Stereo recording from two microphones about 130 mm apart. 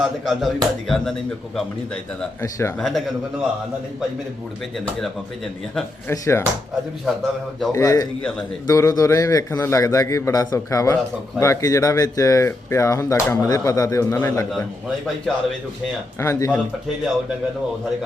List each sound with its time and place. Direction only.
0.0 s speech: centre (ahead or behind)
2.4 s speech: 20° left (ahead or behind)
2.7 s speech: centre (ahead or behind)
6.1 s speech: 20° left (ahead or behind)
7.0 s speech: centre (ahead or behind)
7.7 s speech: 25° left (ahead or behind)
16.2 s speech: 20° left (ahead or behind)